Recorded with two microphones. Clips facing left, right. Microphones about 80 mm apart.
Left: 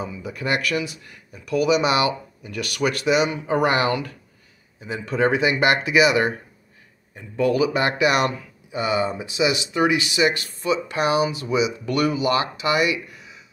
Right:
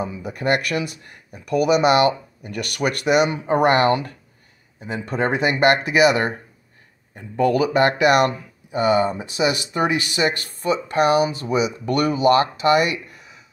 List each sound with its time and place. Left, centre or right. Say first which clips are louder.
0.0 s speech: right 4 dB; right